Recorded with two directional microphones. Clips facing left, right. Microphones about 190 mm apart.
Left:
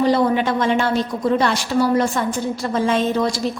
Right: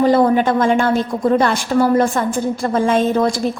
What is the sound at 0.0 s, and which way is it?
A woman's voice, 50° right (ahead or behind).